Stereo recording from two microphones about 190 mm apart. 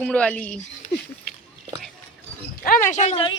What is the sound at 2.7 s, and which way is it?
Speech, 40° left (ahead or behind).